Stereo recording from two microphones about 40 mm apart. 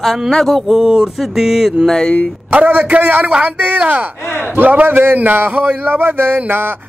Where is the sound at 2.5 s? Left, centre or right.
Right.